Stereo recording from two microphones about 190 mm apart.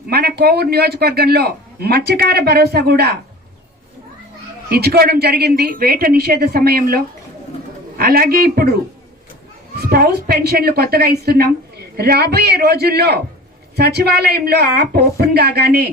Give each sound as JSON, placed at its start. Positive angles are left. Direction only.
{"t": 0.1, "sound": "a woman's voice", "side_deg": -55}
{"t": 4.7, "sound": "a woman's voice", "side_deg": -55}
{"t": 9.8, "sound": "a woman's voice", "side_deg": -55}